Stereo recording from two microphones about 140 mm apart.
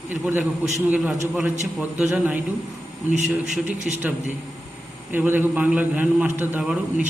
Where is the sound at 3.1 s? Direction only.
60° right (ahead or behind).